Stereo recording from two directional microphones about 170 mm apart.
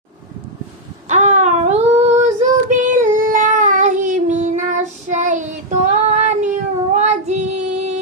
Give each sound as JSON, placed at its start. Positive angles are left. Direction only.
{"t": 1.0, "sound": "child singing", "side_deg": -45}